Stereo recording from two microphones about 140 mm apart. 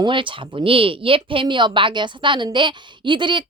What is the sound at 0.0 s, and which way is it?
A woman's voice, 35° right (ahead or behind).